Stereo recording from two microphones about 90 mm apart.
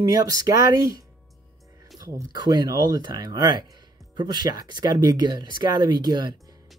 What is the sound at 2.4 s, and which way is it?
Speech, 50° right (ahead or behind).